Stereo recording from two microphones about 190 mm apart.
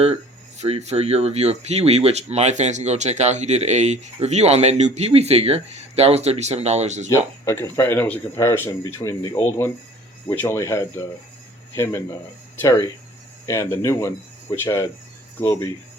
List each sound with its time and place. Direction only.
0.6 s speech: 35° right (ahead or behind)
7.1 s speech: 15° left (ahead or behind)